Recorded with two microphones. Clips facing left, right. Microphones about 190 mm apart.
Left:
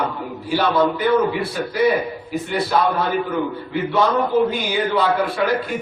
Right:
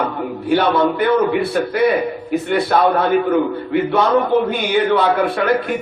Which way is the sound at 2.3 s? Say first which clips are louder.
Right 5 dB; 60° right (ahead or behind).